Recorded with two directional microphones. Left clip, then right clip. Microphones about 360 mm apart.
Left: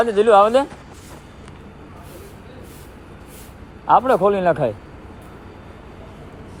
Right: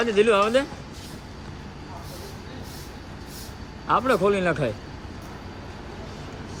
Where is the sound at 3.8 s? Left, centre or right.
Centre.